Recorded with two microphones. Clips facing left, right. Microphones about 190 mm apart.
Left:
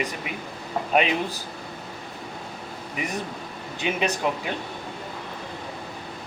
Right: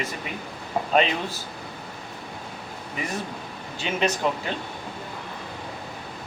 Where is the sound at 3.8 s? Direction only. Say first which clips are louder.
Even; 15° left (ahead or behind).